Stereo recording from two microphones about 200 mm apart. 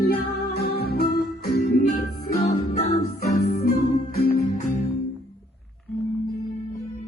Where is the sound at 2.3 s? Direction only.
35° left (ahead or behind).